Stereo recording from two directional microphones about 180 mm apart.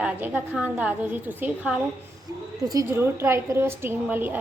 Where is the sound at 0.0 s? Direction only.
10° right (ahead or behind).